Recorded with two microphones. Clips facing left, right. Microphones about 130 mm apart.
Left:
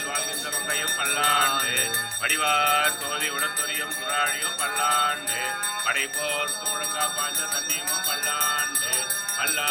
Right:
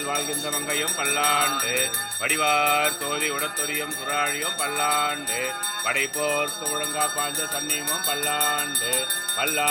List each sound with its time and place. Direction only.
0.7 s jingle bell: 50° right (ahead or behind)
4.8 s jingle bell: 50° right (ahead or behind)
8.3 s speech: 40° right (ahead or behind)